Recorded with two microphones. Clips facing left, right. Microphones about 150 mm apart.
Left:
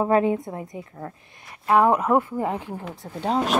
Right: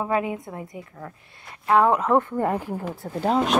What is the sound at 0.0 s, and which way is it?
A woman's voice, 35° left (ahead or behind).